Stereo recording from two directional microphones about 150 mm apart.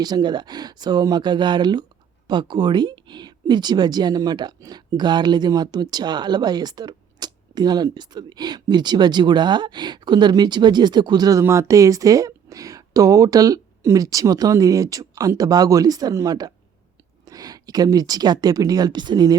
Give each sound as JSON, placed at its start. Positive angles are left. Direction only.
{"t": 0.0, "sound": "speech", "side_deg": -30}